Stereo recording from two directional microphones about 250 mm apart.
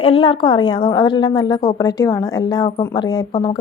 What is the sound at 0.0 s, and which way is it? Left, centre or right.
A woman's voice, left.